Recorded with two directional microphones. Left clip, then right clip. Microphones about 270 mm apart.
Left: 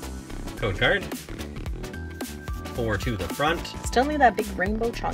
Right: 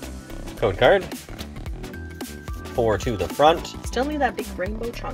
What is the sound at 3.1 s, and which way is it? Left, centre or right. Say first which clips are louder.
Speech: right 9 dB; centre.